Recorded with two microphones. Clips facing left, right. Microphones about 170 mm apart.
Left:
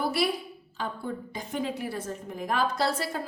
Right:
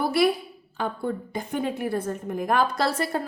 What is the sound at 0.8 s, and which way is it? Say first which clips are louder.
A woman's voice: right 5 dB; 55° right (ahead or behind).